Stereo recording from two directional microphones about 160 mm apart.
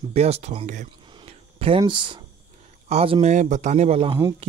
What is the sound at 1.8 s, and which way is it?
Speech, 30° right (ahead or behind).